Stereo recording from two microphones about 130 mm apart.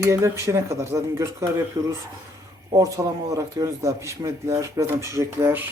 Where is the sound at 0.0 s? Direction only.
25° right (ahead or behind).